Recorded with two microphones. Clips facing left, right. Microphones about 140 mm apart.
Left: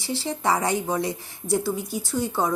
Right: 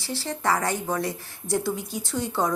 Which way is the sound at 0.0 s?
15° left (ahead or behind).